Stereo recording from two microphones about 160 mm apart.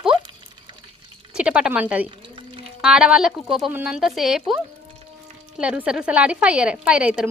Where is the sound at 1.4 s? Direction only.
5° right (ahead or behind).